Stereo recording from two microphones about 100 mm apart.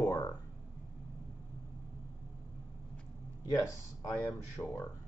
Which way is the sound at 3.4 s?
35° left (ahead or behind).